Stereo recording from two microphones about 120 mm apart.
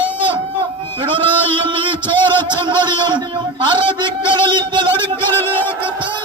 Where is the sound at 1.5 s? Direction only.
45° right (ahead or behind).